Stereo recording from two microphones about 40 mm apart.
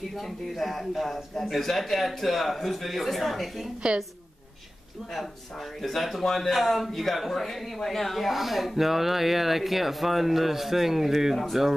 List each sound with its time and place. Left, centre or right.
0.1 s a man's voice: centre
3.8 s a woman's voice: centre
5.8 s a man's voice: centre
11.3 s a man's voice: centre